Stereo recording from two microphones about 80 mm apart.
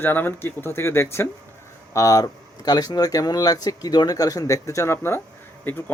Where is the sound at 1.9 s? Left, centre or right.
Left.